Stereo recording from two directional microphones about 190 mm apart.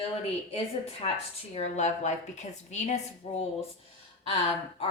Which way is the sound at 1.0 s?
30° left (ahead or behind).